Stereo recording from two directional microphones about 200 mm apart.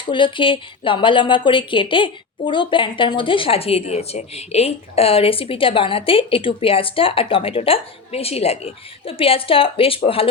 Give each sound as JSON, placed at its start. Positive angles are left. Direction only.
{"t": 0.0, "sound": "a woman's voice", "side_deg": 25}